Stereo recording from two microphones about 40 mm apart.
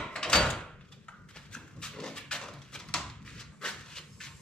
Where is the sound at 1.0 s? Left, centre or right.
Left.